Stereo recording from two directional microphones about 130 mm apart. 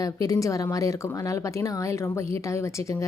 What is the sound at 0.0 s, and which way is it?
Speech, 25° left (ahead or behind).